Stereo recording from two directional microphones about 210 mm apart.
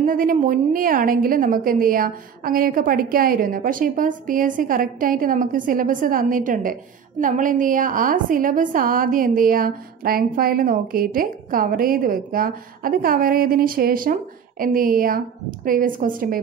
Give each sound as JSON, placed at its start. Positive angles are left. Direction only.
{"t": 0.0, "sound": "a woman's voice", "side_deg": -40}